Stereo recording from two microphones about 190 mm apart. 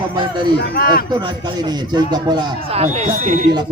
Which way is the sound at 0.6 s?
55° left (ahead or behind).